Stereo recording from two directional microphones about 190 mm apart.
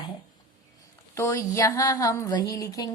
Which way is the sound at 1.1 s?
15° left (ahead or behind).